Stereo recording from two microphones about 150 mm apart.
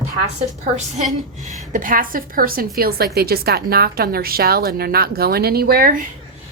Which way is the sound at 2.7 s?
90° right.